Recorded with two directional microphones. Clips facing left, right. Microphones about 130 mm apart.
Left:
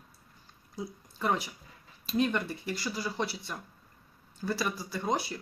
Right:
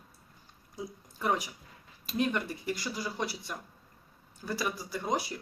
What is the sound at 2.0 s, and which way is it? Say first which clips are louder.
Speech: left 2 dB; 10° right (ahead or behind).